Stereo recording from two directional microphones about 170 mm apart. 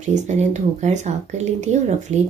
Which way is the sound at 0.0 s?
45° right (ahead or behind).